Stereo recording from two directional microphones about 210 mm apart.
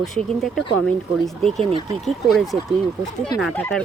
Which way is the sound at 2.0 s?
Centre (ahead or behind).